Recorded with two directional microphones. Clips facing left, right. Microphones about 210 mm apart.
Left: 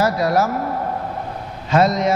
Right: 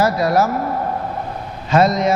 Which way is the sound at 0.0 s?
10° right (ahead or behind).